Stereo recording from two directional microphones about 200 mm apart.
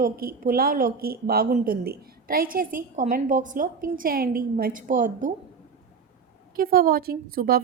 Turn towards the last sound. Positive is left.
turn(degrees=-45)  # may be behind; listen again after turning